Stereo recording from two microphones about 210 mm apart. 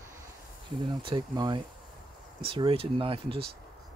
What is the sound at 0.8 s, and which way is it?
Speech, 25° right (ahead or behind).